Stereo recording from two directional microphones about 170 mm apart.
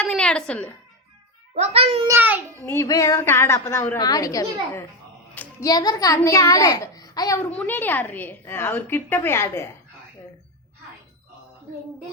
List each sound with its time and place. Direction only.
0.0 s a sound: 5° left (ahead or behind)
1.5 s a child's voice: 40° right (ahead or behind)
2.0 s a child's voice: 10° right (ahead or behind)
2.6 s a woman's voice: 15° left (ahead or behind)
5.3 s a sound: 10° left (ahead or behind)
5.6 s a woman's voice: 25° left (ahead or behind)
7.5 s a woman's voice: 10° left (ahead or behind)